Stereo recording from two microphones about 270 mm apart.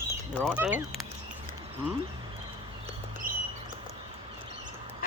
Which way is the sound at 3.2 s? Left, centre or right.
Right.